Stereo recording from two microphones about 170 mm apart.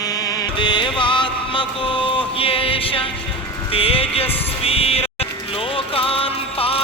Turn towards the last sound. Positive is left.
turn(degrees=35)  # may be behind; listen again after turning